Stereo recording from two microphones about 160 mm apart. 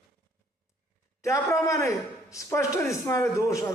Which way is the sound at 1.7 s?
20° left (ahead or behind).